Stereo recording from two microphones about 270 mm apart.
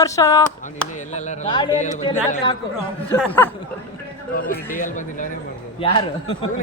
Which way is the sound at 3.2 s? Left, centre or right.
Centre.